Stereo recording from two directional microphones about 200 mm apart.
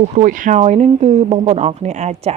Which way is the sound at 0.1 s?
40° right (ahead or behind).